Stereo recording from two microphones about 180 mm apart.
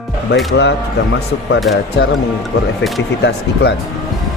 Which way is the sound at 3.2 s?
65° left (ahead or behind).